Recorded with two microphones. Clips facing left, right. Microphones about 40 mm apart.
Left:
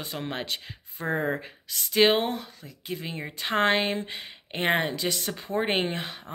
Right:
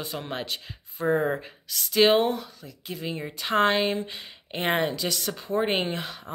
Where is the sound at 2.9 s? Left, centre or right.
Left.